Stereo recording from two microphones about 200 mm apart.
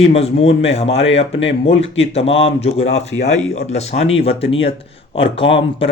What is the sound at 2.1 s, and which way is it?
Speech, 30° left (ahead or behind).